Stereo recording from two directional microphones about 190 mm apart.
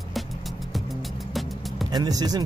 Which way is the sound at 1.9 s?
20° right (ahead or behind).